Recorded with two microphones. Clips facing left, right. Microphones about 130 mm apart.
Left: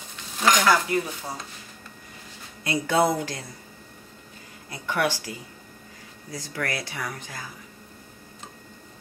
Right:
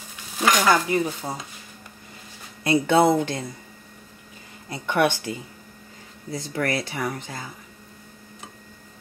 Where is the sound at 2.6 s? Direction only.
25° right (ahead or behind).